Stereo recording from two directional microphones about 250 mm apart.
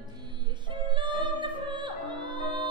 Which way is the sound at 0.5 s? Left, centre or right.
Centre.